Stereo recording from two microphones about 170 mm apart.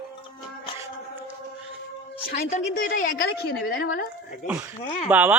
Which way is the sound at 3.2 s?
65° left (ahead or behind).